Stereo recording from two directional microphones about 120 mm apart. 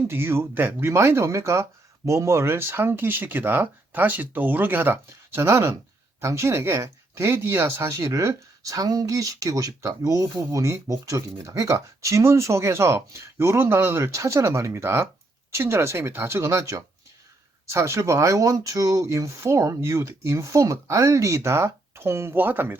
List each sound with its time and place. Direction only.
0.1 s speech: 20° right (ahead or behind)